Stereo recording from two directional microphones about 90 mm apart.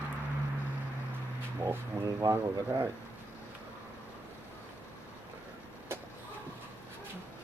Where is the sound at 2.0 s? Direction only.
40° right (ahead or behind).